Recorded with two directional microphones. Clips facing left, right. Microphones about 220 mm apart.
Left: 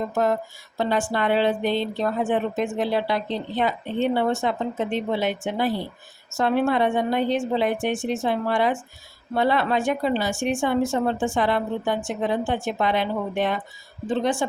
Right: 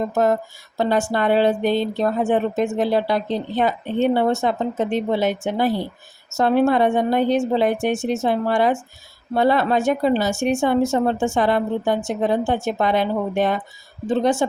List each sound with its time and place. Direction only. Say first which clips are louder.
0.8 s speech: right 4 dB; 40° right (ahead or behind)